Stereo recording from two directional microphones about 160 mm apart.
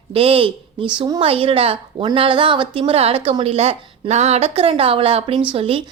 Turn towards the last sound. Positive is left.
turn(degrees=-35)  # may be behind; listen again after turning